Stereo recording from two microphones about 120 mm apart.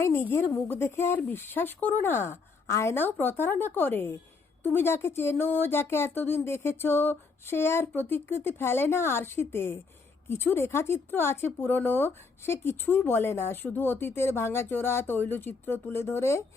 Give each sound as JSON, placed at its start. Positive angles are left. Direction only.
{"t": 0.0, "sound": "speech", "side_deg": 20}